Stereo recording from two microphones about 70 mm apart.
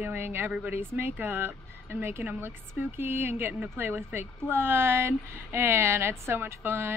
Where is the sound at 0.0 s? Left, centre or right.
Right.